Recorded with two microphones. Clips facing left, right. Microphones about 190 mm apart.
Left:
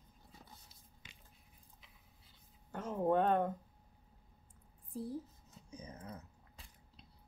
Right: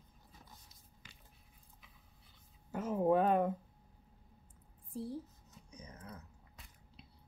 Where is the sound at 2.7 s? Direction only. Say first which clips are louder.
Right 2 dB; 5° right (ahead or behind).